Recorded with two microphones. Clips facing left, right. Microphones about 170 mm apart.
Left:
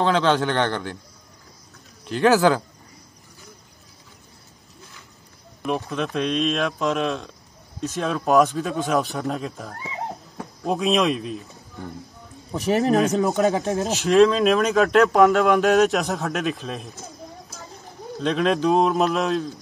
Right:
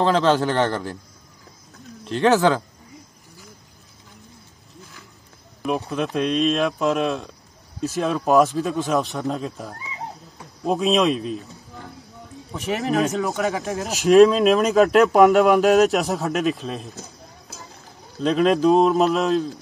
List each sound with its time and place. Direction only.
0.0 s speech: centre (ahead or behind)
2.0 s speech: centre (ahead or behind)
5.6 s speech: centre (ahead or behind)
12.5 s speech: 35° left (ahead or behind)
14.0 s speech: centre (ahead or behind)
15.2 s speech: 15° right (ahead or behind)
15.5 s speech: centre (ahead or behind)
18.2 s speech: centre (ahead or behind)